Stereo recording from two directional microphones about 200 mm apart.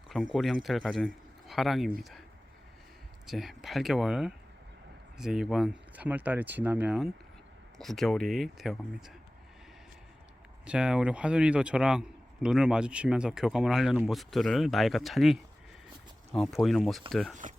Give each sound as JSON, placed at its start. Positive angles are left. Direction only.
{"t": 0.3, "sound": "a man's voice", "side_deg": 0}
{"t": 3.2, "sound": "a man's voice", "side_deg": 0}
{"t": 10.7, "sound": "a man's voice", "side_deg": -5}